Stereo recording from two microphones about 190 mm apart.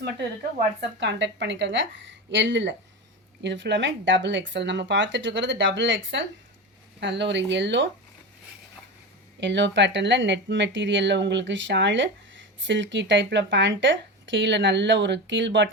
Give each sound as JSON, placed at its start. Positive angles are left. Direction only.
{"t": 0.8, "sound": "speech", "side_deg": -70}
{"t": 9.4, "sound": "speech", "side_deg": -65}